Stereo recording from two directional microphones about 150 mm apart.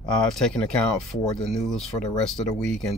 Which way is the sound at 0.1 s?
5° left (ahead or behind).